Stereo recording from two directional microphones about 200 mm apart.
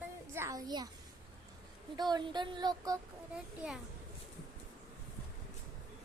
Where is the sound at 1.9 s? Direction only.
20° right (ahead or behind).